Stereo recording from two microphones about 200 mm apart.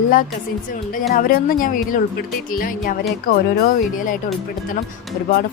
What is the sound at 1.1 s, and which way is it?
Speech, 45° left (ahead or behind).